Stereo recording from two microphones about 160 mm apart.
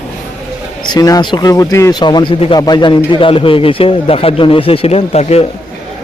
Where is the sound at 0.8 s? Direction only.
25° left (ahead or behind).